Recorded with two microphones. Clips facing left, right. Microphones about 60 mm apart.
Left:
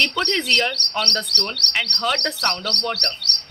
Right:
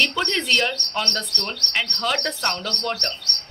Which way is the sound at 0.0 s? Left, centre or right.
Centre.